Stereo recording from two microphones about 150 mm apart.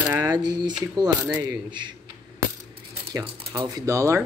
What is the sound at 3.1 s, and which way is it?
Speech, 20° right (ahead or behind).